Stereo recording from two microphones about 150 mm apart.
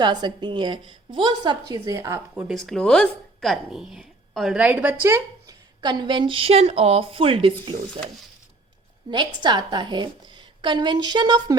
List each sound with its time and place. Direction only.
0.0 s a woman's voice: 30° right (ahead or behind)
2.5 s a woman's voice: centre (ahead or behind); by 5.5 s 15° right (ahead or behind)
5.8 s a woman's voice: 30° right (ahead or behind)
9.0 s a woman's voice: 30° right (ahead or behind)